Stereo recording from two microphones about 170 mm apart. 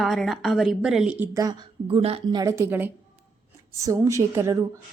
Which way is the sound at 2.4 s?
15° right (ahead or behind).